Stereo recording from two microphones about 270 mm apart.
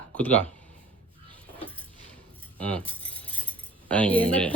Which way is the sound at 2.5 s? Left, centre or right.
Centre.